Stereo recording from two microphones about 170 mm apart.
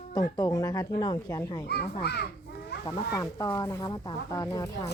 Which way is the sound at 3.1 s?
20° left (ahead or behind).